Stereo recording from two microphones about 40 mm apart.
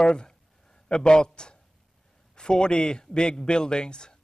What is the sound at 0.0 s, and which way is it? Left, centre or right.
A man's voice, left.